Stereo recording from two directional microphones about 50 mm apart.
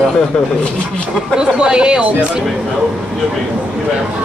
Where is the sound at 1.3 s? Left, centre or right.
Centre.